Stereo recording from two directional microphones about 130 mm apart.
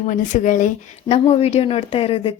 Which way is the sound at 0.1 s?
70° left (ahead or behind).